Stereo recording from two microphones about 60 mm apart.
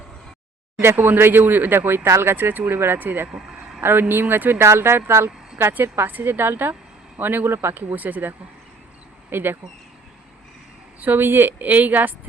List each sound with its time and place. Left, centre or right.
0.8 s a woman's voice: right
2.3 s a woman's voice: right
11.0 s a woman's voice: right